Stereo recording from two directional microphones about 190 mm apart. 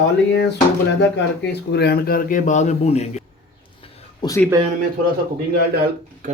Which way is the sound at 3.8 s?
25° left (ahead or behind).